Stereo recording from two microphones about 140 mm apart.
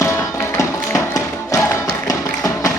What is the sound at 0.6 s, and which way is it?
Music, 20° left (ahead or behind).